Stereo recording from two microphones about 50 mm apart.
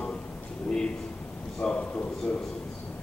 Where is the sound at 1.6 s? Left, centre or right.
Centre.